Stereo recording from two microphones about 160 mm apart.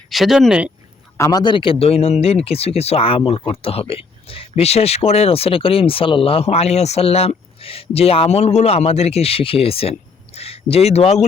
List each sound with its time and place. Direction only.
0.1 s speech: centre (ahead or behind)
1.1 s speech: 20° left (ahead or behind); by 11.3 s 45° left (ahead or behind)